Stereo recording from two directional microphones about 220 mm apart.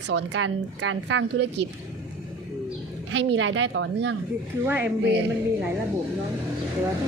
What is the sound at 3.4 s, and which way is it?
Speech, 55° right (ahead or behind).